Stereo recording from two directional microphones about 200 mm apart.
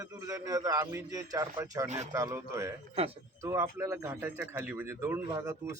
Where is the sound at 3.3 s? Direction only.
15° right (ahead or behind).